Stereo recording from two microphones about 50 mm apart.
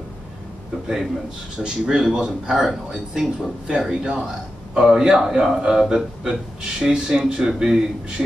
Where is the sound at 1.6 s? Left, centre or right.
Centre.